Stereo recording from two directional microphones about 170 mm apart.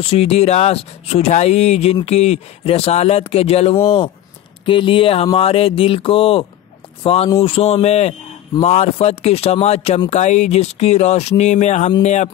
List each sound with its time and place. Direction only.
0.0 s speech: 35° left (ahead or behind)